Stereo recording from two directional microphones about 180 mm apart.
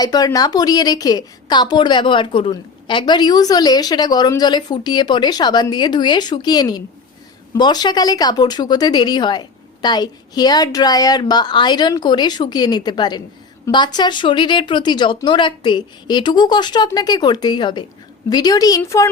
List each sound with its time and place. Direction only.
0.0 s a woman's voice: 20° left (ahead or behind)